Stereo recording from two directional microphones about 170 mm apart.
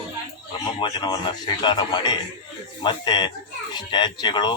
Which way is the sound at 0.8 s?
25° left (ahead or behind).